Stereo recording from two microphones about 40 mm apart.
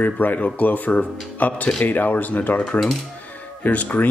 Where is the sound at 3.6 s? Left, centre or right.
Left.